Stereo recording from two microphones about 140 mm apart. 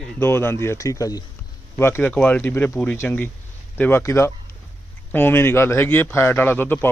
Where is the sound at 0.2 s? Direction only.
15° left (ahead or behind).